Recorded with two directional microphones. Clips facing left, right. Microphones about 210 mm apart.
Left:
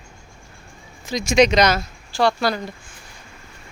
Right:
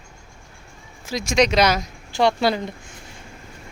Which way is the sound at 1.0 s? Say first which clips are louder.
Left 3 dB; centre (ahead or behind).